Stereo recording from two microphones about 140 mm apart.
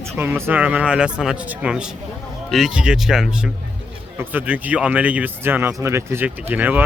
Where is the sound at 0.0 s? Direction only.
15° right (ahead or behind).